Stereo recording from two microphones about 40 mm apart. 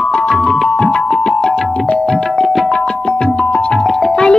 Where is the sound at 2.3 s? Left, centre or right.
Centre.